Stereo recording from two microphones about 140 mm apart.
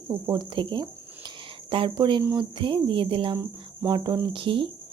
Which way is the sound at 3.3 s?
20° right (ahead or behind).